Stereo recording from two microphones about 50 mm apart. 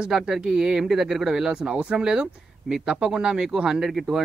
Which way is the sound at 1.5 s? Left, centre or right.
Centre.